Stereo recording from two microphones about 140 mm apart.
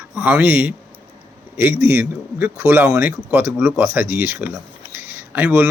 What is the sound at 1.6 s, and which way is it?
Speech, 15° right (ahead or behind).